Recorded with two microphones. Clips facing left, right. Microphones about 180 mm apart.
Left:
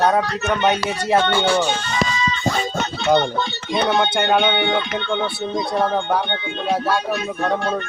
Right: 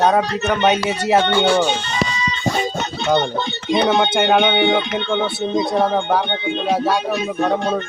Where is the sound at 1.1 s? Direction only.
20° right (ahead or behind).